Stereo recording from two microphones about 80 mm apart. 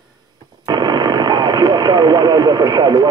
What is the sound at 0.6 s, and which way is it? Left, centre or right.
Speech, right.